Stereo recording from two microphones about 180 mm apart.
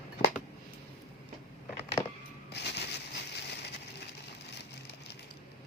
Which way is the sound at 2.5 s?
70° left (ahead or behind).